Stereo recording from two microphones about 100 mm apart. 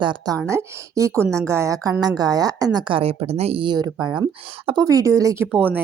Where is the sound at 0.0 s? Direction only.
50° right (ahead or behind).